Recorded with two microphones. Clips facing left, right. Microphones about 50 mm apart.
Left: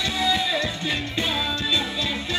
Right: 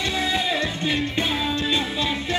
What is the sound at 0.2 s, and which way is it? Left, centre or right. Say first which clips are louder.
Music: left 2 dB; right.